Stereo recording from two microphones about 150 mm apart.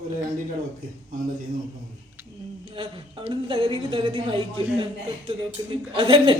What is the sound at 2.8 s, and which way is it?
Speech, 35° right (ahead or behind).